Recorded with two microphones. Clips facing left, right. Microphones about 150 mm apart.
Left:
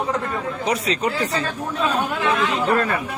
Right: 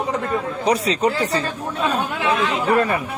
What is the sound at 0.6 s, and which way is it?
Speech, 35° right (ahead or behind).